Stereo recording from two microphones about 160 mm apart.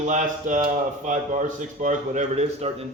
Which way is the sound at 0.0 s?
50° right (ahead or behind).